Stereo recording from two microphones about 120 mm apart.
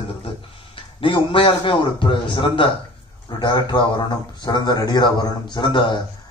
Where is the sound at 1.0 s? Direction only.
45° left (ahead or behind).